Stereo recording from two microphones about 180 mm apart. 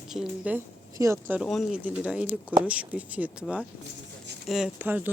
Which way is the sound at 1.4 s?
Centre (ahead or behind).